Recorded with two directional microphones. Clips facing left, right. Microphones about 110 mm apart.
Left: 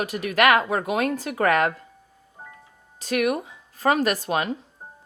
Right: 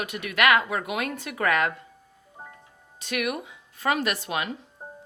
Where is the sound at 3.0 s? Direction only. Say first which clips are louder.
Left 6 dB; 40° left (ahead or behind).